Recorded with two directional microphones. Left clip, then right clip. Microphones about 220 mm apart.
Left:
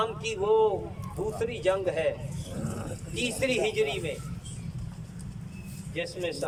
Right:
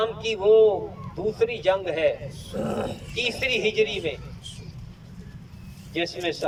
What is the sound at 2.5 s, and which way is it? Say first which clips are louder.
Speech: right 10 dB; 45° right (ahead or behind).